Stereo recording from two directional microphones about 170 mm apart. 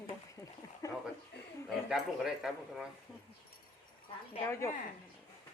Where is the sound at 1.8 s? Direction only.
Centre (ahead or behind).